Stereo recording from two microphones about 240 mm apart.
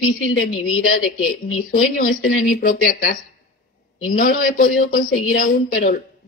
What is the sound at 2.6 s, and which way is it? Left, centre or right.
A woman's voice, left.